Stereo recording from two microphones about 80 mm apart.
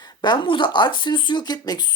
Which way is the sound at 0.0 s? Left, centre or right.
Left.